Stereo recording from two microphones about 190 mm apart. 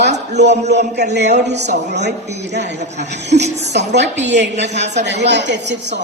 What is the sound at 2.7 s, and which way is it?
Speech, 35° right (ahead or behind).